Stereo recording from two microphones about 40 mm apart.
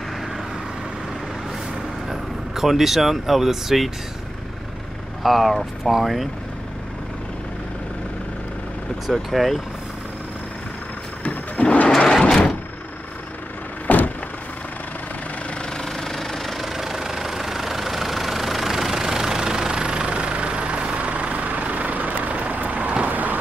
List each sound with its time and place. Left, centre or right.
2.0 s speech: centre
5.2 s speech: centre
9.3 s speech: centre
11.2 s a sound: left
12.0 s sliding door: left
12.3 s door: centre
13.8 s vehicle: left
15.8 s engine: centre; by 23.3 s right